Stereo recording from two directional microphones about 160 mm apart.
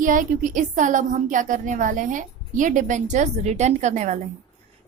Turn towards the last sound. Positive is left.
turn(degrees=-45)  # may be behind; listen again after turning